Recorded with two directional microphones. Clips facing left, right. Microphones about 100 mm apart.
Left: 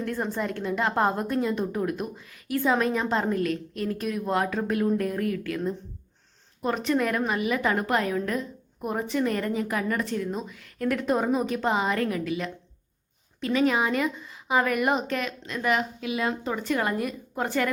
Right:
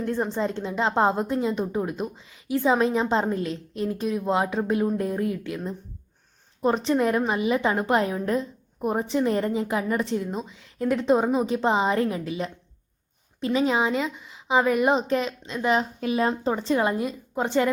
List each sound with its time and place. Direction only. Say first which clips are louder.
0.0 s a woman's voice: right 3 dB; 25° right (ahead or behind)
6.6 s a woman's voice: right 3 dB; 30° right (ahead or behind)